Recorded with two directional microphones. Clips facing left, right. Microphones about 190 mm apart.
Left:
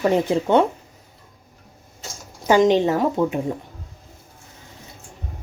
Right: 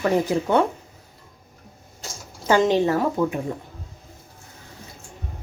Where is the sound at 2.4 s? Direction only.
15° left (ahead or behind).